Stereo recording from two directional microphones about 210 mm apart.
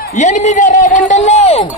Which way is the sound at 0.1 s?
35° left (ahead or behind).